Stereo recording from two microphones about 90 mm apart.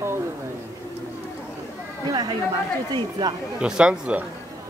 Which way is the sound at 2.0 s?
50° right (ahead or behind).